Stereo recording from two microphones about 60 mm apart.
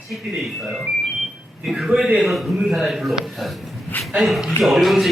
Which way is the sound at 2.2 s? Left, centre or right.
Centre.